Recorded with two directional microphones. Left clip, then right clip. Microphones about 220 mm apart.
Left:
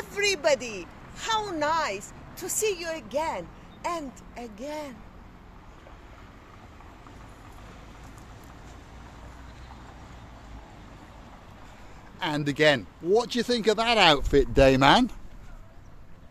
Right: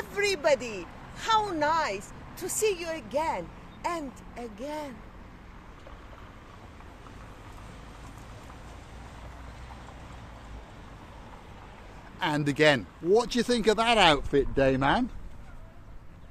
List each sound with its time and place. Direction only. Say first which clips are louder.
0.0 s a woman's voice: left 2 dB; centre (ahead or behind)
12.2 s speech: even; 5° right (ahead or behind)
14.3 s speech: left 5 dB; 50° left (ahead or behind)